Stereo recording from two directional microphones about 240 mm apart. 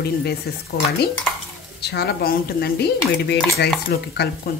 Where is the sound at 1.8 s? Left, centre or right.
Left.